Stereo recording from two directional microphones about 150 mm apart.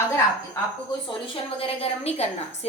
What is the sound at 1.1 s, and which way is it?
Speech, 35° left (ahead or behind).